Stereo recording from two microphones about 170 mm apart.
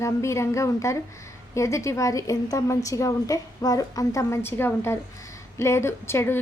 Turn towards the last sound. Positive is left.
turn(degrees=15)  # may be behind; listen again after turning